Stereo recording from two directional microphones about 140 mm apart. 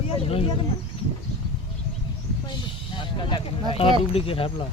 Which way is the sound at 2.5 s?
35° left (ahead or behind).